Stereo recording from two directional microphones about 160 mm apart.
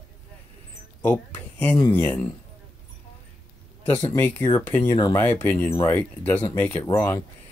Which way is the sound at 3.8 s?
15° left (ahead or behind).